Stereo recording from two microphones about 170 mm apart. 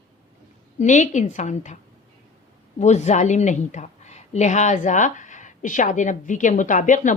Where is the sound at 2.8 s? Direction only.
40° left (ahead or behind).